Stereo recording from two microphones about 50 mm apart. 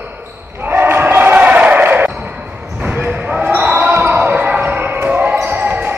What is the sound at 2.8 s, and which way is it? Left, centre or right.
Basketball bounce, right.